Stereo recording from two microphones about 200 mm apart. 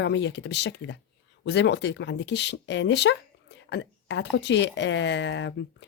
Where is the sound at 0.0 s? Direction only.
60° left (ahead or behind).